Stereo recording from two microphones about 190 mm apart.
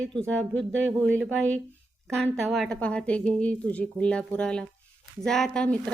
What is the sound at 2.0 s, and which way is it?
A woman's voice, centre (ahead or behind).